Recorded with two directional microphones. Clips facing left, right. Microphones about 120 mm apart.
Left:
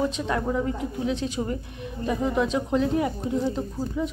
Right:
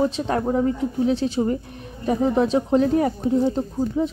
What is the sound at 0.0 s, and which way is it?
Speech, 35° right (ahead or behind).